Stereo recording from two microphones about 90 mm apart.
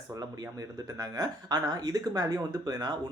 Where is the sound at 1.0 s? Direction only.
45° right (ahead or behind).